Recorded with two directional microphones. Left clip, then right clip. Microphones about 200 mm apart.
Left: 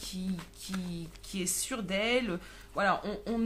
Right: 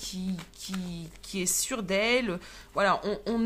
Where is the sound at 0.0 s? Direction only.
25° right (ahead or behind).